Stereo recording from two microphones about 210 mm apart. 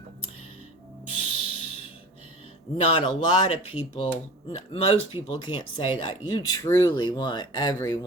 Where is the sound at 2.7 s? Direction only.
30° left (ahead or behind).